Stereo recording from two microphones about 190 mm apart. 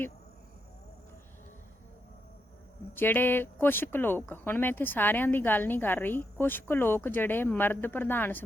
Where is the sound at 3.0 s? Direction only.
10° left (ahead or behind).